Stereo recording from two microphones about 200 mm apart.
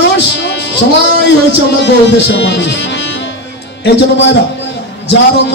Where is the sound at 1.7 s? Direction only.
60° left (ahead or behind).